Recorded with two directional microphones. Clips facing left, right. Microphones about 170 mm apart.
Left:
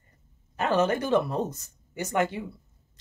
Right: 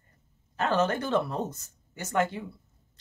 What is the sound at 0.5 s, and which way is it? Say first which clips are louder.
Speech: left 2 dB; 15° left (ahead or behind).